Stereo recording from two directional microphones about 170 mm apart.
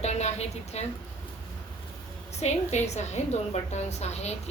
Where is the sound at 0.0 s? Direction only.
40° left (ahead or behind).